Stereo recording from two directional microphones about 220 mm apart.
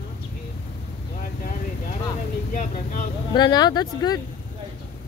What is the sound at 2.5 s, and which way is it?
Speech, 40° left (ahead or behind).